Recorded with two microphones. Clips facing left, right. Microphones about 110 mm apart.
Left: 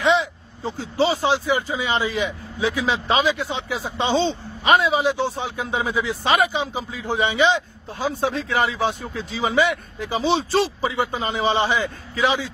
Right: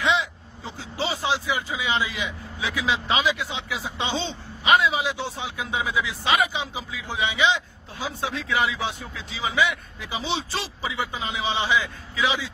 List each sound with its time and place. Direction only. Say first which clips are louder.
0.0 s speech: left 5 dB; 40° left (ahead or behind)